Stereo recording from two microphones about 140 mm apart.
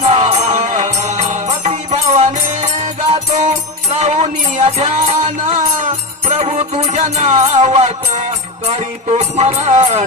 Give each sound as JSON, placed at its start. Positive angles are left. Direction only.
{"t": 0.0, "sound": "music", "side_deg": -50}